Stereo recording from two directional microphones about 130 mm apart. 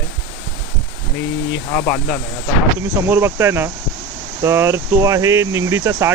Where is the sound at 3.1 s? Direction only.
20° right (ahead or behind).